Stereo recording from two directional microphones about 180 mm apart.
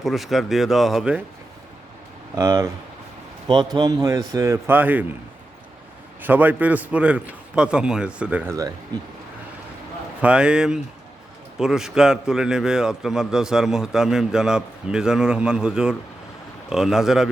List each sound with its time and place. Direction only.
0.0 s a man's voice: centre (ahead or behind)
2.3 s a man's voice: 20° right (ahead or behind)
6.2 s a man's voice: 10° right (ahead or behind)
10.2 s a man's voice: 5° right (ahead or behind)